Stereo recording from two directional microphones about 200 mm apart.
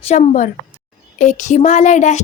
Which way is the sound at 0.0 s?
30° left (ahead or behind).